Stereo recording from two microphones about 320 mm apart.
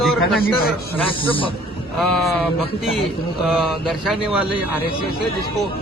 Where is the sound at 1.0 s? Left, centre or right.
Centre.